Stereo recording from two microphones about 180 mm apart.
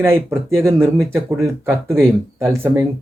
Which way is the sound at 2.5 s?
15° right (ahead or behind).